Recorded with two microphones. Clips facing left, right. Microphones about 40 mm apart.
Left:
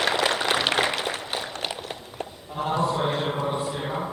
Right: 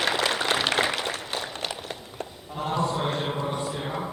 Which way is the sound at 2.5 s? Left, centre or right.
Centre.